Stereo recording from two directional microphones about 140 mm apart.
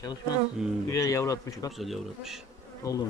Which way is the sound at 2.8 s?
25° left (ahead or behind).